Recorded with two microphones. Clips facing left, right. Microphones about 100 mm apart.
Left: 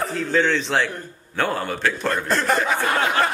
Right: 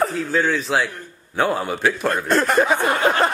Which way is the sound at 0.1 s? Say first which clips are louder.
Even; 5° right (ahead or behind).